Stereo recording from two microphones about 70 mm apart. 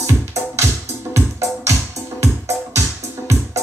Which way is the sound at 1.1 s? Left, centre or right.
Right.